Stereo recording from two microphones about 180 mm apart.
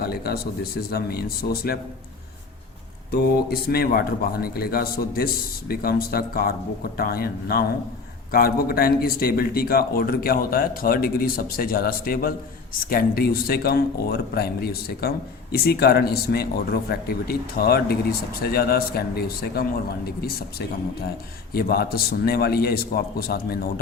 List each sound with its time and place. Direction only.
0.0 s a man's voice: 60° left (ahead or behind)
3.1 s a man's voice: 60° left (ahead or behind)